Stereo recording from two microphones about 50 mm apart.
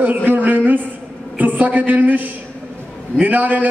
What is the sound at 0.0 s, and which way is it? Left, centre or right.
A man's voice, right.